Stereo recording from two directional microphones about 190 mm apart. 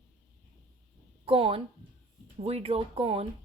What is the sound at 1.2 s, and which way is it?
Speech, 30° right (ahead or behind).